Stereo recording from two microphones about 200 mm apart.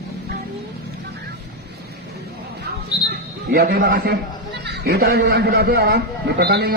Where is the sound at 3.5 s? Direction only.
50° right (ahead or behind).